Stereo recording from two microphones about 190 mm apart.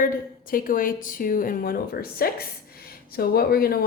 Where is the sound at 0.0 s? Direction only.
45° left (ahead or behind).